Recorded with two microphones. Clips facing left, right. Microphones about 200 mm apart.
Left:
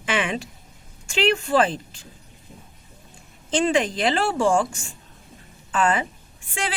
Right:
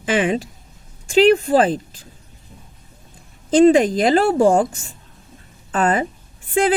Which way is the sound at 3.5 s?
40° right (ahead or behind).